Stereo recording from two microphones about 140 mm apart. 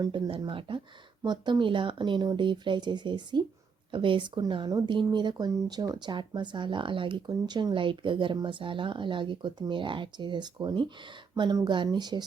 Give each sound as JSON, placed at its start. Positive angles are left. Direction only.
{"t": 0.0, "sound": "speech", "side_deg": -35}